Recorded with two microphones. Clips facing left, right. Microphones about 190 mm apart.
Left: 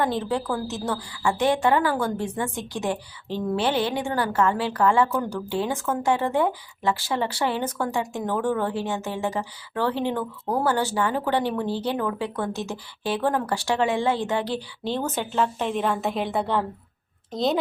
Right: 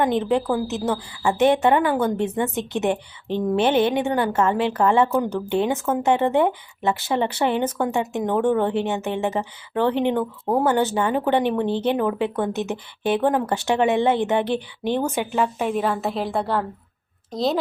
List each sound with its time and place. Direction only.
0.0 s a woman's voice: 20° right (ahead or behind); by 17.6 s centre (ahead or behind)